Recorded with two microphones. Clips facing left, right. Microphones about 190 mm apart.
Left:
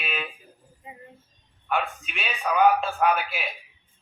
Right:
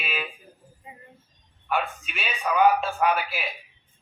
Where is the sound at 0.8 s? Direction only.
20° left (ahead or behind).